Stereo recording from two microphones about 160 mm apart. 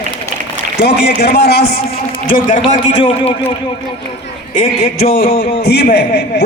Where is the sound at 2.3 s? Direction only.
55° left (ahead or behind).